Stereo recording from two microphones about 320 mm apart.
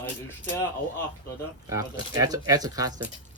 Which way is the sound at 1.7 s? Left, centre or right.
Centre.